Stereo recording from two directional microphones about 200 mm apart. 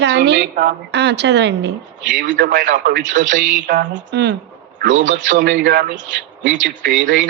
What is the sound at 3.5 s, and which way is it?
Music, 45° right (ahead or behind).